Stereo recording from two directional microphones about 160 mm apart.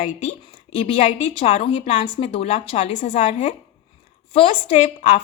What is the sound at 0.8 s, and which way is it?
A woman's voice, 40° left (ahead or behind).